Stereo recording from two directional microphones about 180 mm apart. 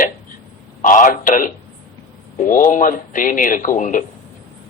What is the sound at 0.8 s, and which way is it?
A man's voice, 45° left (ahead or behind).